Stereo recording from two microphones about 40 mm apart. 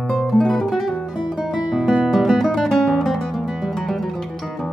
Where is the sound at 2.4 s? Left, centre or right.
Centre.